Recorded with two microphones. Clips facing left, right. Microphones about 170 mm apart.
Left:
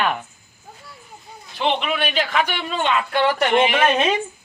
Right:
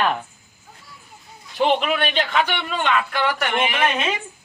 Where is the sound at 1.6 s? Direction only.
5° right (ahead or behind).